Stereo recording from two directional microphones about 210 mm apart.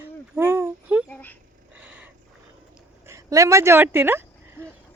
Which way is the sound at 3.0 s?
15° right (ahead or behind).